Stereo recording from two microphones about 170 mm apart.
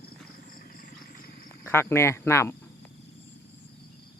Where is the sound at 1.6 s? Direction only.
15° left (ahead or behind).